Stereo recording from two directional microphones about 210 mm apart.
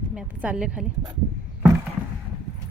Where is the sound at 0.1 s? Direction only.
5° right (ahead or behind).